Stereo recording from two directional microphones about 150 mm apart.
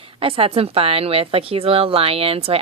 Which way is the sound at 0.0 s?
40° right (ahead or behind).